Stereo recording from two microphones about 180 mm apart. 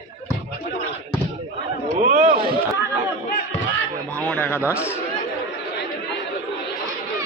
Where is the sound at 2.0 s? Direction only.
50° right (ahead or behind).